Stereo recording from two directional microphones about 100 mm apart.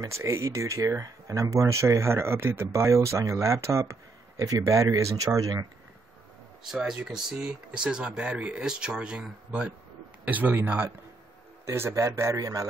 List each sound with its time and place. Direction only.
0.0 s speech: 30° right (ahead or behind)
6.7 s speech: 5° right (ahead or behind); by 12.6 s 35° right (ahead or behind)